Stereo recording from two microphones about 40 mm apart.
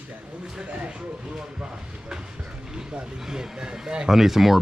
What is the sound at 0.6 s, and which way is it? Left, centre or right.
Speech, right.